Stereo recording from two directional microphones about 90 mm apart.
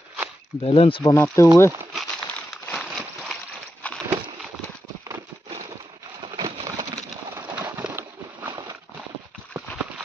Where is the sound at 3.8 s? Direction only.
15° left (ahead or behind).